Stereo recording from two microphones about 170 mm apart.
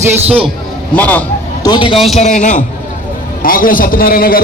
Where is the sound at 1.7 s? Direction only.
30° left (ahead or behind).